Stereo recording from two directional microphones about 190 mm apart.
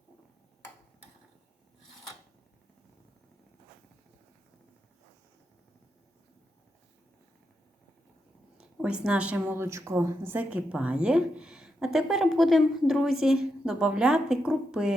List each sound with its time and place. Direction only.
8.5 s a woman's voice: 5° right (ahead or behind)